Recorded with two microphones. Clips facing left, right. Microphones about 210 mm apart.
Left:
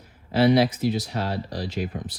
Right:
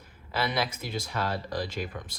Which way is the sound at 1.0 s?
50° right (ahead or behind).